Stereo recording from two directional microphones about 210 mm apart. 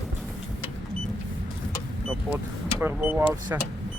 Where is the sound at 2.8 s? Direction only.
10° right (ahead or behind).